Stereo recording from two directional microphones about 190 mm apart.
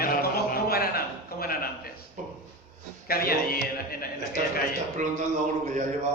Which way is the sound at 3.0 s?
50° left (ahead or behind).